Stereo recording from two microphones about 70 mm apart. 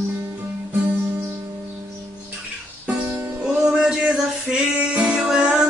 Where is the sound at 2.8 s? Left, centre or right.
Right.